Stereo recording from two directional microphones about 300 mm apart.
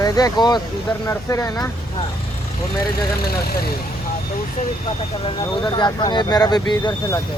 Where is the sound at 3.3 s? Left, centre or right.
Left.